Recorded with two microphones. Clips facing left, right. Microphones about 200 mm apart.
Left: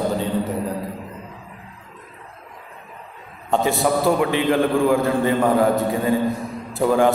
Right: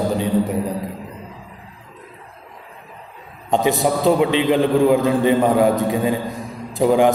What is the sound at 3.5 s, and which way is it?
Mantra, 15° right (ahead or behind).